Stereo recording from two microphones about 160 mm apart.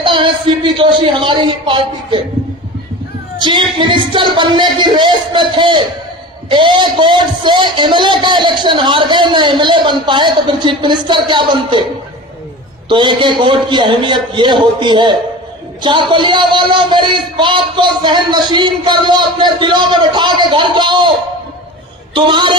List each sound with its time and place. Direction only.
0.0 s speech: 30° right (ahead or behind)
3.4 s a man's voice: 30° right (ahead or behind)
12.9 s a man's voice: 30° right (ahead or behind)
22.1 s speech: 30° right (ahead or behind)